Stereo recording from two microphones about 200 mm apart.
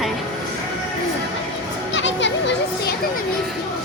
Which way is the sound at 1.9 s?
65° left (ahead or behind).